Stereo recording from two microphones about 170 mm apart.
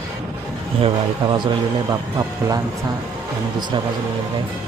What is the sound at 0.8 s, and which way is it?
Speech, 30° right (ahead or behind).